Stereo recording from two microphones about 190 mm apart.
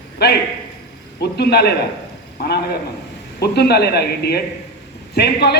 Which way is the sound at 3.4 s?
60° left (ahead or behind).